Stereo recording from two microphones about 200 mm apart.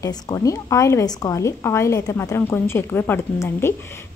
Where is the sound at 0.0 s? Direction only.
15° left (ahead or behind).